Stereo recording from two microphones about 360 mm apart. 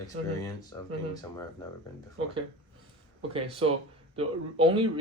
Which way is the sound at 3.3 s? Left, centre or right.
Centre.